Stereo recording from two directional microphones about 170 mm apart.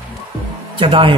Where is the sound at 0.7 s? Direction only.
30° right (ahead or behind).